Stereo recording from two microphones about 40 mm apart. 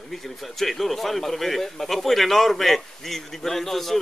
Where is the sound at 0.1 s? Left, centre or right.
Centre.